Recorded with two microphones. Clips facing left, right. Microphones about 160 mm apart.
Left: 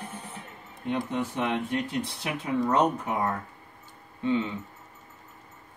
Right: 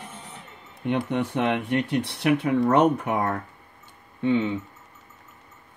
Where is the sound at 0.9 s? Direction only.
65° right (ahead or behind).